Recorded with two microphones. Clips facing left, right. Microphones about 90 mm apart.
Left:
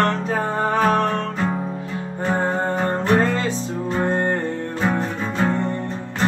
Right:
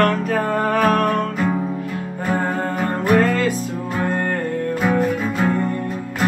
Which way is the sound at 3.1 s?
25° left (ahead or behind).